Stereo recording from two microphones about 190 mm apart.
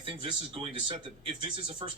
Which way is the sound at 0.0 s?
25° right (ahead or behind).